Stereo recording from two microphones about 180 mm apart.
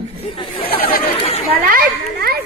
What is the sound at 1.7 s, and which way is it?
Speech, 55° right (ahead or behind).